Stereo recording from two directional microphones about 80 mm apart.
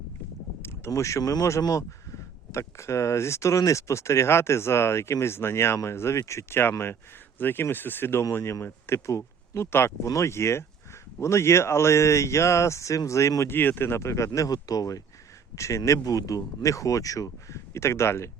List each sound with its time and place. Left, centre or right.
0.9 s speech: left
14.3 s speech: left
15.5 s speech: left